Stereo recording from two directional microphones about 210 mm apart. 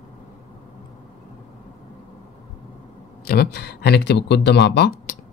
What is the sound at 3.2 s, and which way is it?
Speech, 50° left (ahead or behind).